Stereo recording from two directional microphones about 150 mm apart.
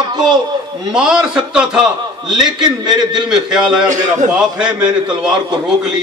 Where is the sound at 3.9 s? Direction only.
55° right (ahead or behind).